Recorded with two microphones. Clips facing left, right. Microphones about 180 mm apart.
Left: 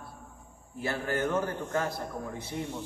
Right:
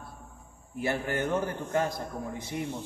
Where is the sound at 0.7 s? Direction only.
20° right (ahead or behind).